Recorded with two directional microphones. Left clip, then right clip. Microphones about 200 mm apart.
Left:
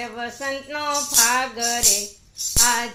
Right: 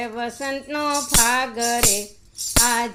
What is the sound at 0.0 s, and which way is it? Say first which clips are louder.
Music: right 1 dB; 45° right (ahead or behind).